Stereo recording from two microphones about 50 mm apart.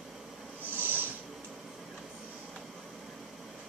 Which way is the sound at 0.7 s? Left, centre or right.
Right.